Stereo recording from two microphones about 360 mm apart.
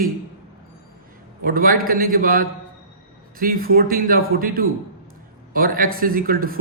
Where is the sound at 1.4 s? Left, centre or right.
Right.